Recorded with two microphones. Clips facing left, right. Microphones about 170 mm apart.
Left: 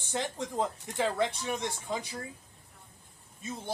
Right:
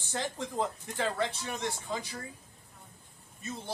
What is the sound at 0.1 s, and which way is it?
A man's voice, 15° left (ahead or behind).